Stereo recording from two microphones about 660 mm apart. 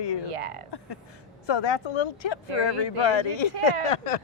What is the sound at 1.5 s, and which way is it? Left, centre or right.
Speech, left.